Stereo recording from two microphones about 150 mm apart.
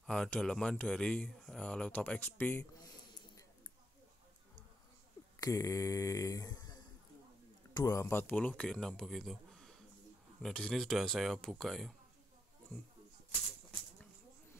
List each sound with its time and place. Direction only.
0.0 s speech: 5° left (ahead or behind)
5.4 s speech: 20° left (ahead or behind); by 11.9 s centre (ahead or behind)